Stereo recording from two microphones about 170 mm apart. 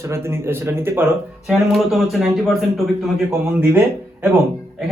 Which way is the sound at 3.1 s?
10° right (ahead or behind).